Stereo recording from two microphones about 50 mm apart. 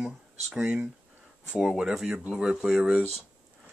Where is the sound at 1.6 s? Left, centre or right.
Centre.